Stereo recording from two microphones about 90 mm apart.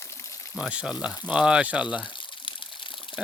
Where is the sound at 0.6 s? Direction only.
10° right (ahead or behind).